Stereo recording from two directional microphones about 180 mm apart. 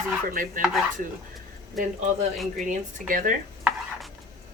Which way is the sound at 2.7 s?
50° right (ahead or behind).